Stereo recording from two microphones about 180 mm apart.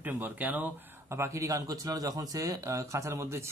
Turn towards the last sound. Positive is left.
turn(degrees=-15)  # may be behind; listen again after turning